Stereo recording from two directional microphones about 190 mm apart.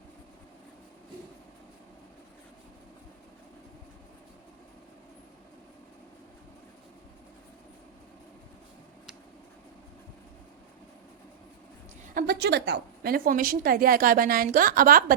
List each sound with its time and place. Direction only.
12.1 s a woman's voice: 55° right (ahead or behind)